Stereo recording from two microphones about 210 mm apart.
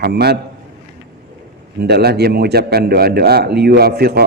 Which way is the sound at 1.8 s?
50° right (ahead or behind).